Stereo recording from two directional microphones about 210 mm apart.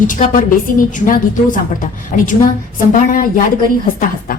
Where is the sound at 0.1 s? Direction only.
40° left (ahead or behind).